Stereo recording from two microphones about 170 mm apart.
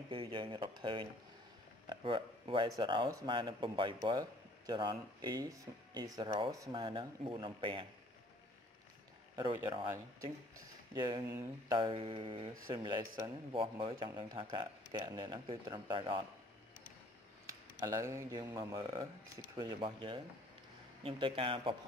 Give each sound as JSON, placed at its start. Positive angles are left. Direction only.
{"t": 0.1, "sound": "speech", "side_deg": -30}
{"t": 9.3, "sound": "speech", "side_deg": -20}
{"t": 11.0, "sound": "speech", "side_deg": -20}
{"t": 17.5, "sound": "a man's voice", "side_deg": -20}